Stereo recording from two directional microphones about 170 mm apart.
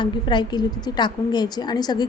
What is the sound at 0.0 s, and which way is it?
A woman's voice, 25° left (ahead or behind).